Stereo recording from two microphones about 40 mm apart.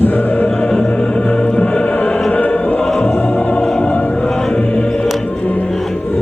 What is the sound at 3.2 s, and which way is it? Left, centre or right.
Music, left.